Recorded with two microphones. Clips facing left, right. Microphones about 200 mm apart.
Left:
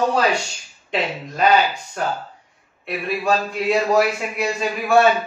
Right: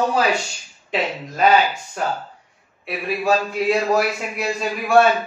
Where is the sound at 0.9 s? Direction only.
Centre (ahead or behind).